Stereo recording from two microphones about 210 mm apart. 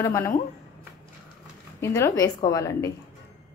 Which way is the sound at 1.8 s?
15° left (ahead or behind).